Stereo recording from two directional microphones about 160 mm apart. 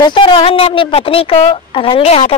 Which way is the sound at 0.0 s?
30° left (ahead or behind).